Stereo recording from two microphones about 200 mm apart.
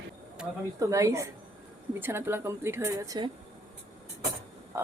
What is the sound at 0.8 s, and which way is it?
A woman's voice, 15° right (ahead or behind).